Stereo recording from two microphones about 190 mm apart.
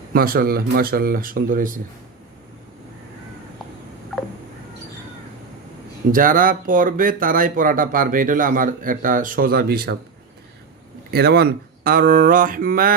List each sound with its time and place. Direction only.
0.1 s speech: 50° right (ahead or behind)
6.1 s speech: 45° right (ahead or behind)
11.1 s speech: 55° right (ahead or behind)